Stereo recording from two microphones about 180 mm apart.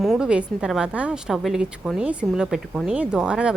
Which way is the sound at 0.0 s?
Centre (ahead or behind).